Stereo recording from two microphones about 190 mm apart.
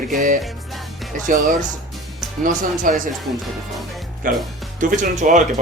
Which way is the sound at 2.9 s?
45° right (ahead or behind).